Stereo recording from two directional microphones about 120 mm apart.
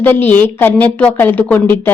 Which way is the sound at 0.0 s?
15° left (ahead or behind).